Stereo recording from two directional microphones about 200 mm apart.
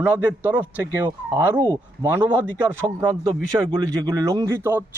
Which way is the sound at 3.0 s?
20° right (ahead or behind).